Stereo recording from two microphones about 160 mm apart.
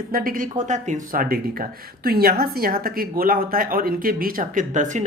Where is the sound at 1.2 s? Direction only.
70° right (ahead or behind).